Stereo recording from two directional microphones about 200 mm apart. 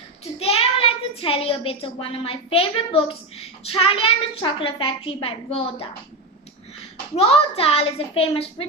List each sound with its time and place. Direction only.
0.3 s a child's voice: 30° left (ahead or behind)
7.2 s a child's voice: 30° left (ahead or behind)